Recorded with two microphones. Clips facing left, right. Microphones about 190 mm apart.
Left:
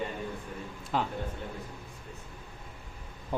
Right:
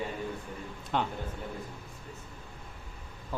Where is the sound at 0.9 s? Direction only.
Centre (ahead or behind).